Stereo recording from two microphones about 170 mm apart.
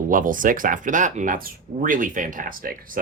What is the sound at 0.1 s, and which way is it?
Speech, 50° right (ahead or behind).